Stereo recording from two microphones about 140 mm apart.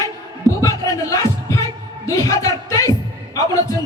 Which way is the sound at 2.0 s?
25° left (ahead or behind).